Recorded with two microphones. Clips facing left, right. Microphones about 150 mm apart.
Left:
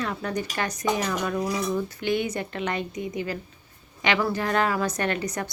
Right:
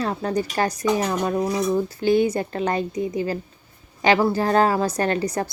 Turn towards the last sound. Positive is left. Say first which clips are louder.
# right 5 dB
turn(degrees=-35)  # may be behind; listen again after turning